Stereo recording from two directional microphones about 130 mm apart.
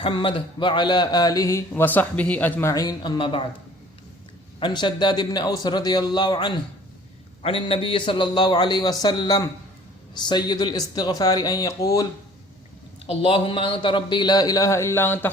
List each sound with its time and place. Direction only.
0.0 s a man's voice: 40° left (ahead or behind)
1.7 s speech: 15° left (ahead or behind); by 3.4 s 40° left (ahead or behind)
4.6 s a man's voice: 35° left (ahead or behind)
7.4 s a man's voice: 45° left (ahead or behind); by 12.0 s 25° left (ahead or behind)
13.1 s a man's voice: 45° left (ahead or behind); by 15.3 s 15° left (ahead or behind)